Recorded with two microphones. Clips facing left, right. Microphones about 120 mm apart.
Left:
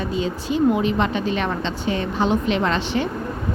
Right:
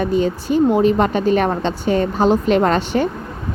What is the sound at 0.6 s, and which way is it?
A woman's voice, 40° right (ahead or behind).